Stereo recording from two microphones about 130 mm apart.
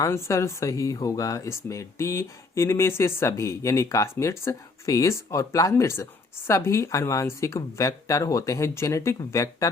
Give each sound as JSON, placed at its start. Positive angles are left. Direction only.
{"t": 0.0, "sound": "speech", "side_deg": 20}